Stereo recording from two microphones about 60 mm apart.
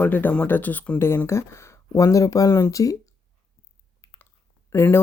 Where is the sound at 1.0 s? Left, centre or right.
Left.